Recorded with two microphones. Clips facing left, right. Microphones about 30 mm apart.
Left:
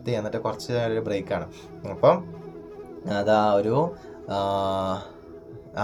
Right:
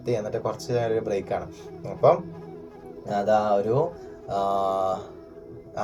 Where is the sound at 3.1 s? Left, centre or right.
Left.